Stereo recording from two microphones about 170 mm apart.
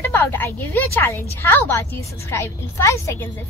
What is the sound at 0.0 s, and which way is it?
A woman's voice, 15° left (ahead or behind).